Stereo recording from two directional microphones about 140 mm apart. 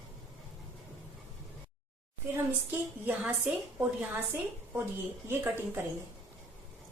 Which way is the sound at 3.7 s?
10° right (ahead or behind).